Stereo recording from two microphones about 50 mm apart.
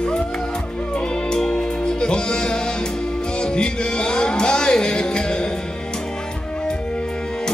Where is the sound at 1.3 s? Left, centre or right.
Centre.